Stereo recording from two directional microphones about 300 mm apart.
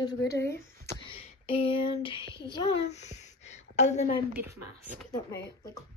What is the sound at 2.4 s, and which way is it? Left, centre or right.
A woman's voice, centre.